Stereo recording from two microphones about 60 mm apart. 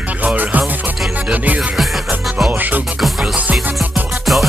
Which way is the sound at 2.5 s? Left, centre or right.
Right.